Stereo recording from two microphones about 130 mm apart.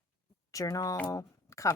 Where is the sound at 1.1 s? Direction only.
25° left (ahead or behind).